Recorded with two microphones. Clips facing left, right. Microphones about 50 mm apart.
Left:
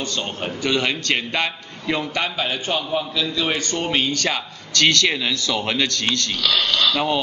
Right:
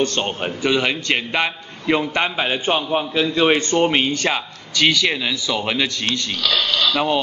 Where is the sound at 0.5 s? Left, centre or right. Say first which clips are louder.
Right 1 dB; centre.